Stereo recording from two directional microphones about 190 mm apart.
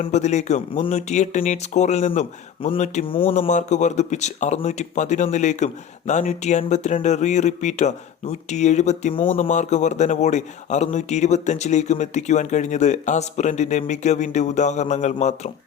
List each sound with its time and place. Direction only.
0.0 s speech: 35° left (ahead or behind)
3.3 s speech: 40° left (ahead or behind)
9.4 s speech: 40° left (ahead or behind)